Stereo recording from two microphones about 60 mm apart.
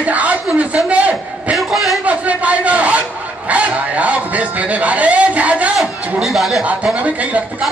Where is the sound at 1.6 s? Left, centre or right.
Centre.